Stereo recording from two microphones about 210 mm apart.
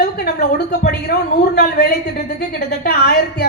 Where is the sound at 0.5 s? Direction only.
50° left (ahead or behind).